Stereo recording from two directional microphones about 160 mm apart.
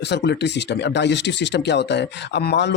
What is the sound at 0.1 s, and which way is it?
Speech, 90° left.